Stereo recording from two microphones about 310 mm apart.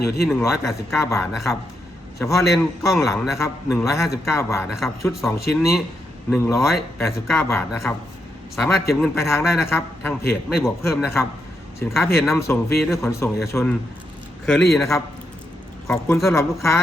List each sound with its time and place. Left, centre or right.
0.0 s speech: left
0.3 s a man's voice: centre
9.0 s a man's voice: centre
9.4 s a man's voice: centre